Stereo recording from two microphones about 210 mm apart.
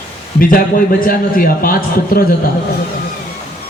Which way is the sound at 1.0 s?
45° left (ahead or behind).